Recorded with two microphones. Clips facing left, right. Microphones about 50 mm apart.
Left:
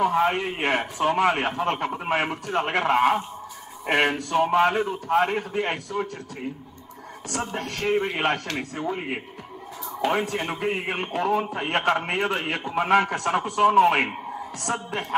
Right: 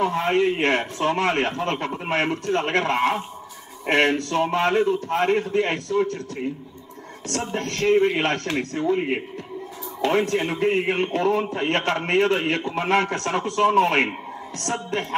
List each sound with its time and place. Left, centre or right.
0.0 s a man's voice: centre
7.3 s a man's voice: centre
8.9 s a man's voice: centre
10.0 s a man's voice: centre